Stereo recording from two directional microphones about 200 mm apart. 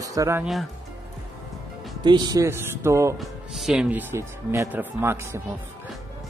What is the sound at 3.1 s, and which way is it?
Speech, centre (ahead or behind).